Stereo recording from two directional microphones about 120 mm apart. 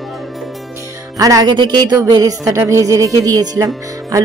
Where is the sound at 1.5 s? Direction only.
40° right (ahead or behind).